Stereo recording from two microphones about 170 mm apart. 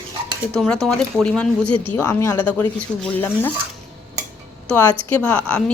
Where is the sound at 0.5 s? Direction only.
5° left (ahead or behind).